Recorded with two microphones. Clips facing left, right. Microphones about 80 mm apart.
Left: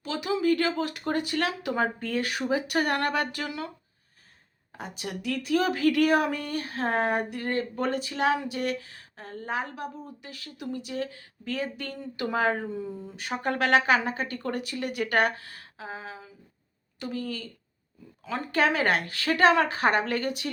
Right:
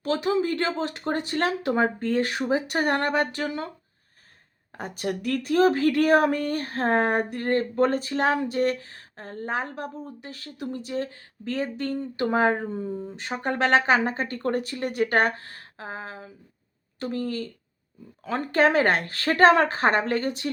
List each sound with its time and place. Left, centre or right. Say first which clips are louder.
0.0 s speech: right 3 dB; right
4.8 s speech: right 6 dB; right
13.3 s speech: right 2 dB; right